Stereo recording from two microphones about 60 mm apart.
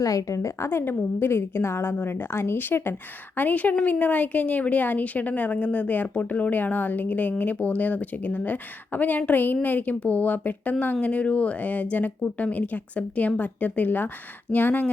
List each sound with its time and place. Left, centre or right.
0.0 s a woman's voice: left
0.7 s a woman's voice: left